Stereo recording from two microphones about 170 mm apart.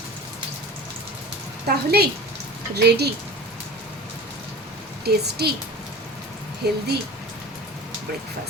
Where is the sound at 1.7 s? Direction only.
70° right (ahead or behind).